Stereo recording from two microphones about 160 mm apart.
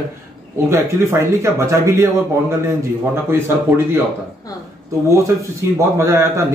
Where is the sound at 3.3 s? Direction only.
15° right (ahead or behind).